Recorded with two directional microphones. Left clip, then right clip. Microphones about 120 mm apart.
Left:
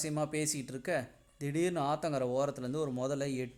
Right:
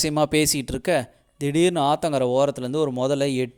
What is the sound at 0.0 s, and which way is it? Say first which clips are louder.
Speech: right 14 dB; 90° right.